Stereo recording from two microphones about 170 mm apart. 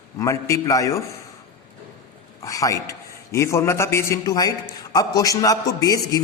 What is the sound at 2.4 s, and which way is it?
A man's voice, 20° left (ahead or behind).